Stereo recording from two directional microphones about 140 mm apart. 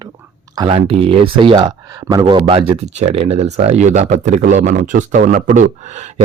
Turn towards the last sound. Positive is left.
turn(degrees=-55)  # may be behind; listen again after turning